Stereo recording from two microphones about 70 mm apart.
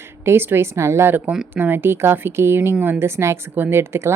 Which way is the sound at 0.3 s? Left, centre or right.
Right.